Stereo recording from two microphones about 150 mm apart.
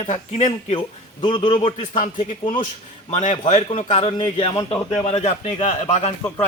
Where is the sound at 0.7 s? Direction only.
30° left (ahead or behind).